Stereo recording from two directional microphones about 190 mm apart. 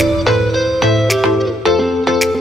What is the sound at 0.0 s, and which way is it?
Music, centre (ahead or behind).